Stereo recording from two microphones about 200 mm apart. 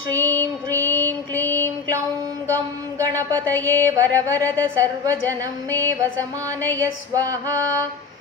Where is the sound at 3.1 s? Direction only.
10° left (ahead or behind).